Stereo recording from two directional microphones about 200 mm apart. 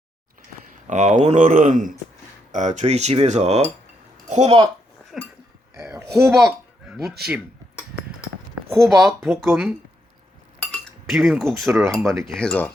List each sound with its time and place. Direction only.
0.9 s speech: 35° right (ahead or behind)
5.7 s a sound: 10° right (ahead or behind)
6.2 s speech: centre (ahead or behind)
8.7 s speech: centre (ahead or behind)
10.7 s cutlery: centre (ahead or behind)
11.7 s speech: 15° right (ahead or behind)
12.2 s speech: centre (ahead or behind)